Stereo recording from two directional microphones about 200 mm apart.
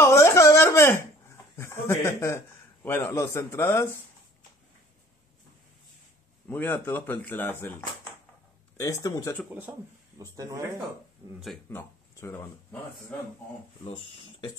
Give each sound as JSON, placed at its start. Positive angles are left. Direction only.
{"t": 0.0, "sound": "a sound", "side_deg": 15}
{"t": 1.6, "sound": "a man's voice", "side_deg": 15}
{"t": 6.5, "sound": "a man's voice", "side_deg": 10}
{"t": 8.7, "sound": "a man's voice", "side_deg": 15}
{"t": 9.5, "sound": "speech", "side_deg": -10}
{"t": 11.3, "sound": "speech", "side_deg": 0}
{"t": 11.7, "sound": "speech", "side_deg": 10}
{"t": 13.8, "sound": "speech", "side_deg": 25}